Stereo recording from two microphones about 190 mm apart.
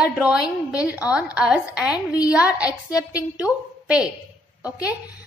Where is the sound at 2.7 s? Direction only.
20° left (ahead or behind).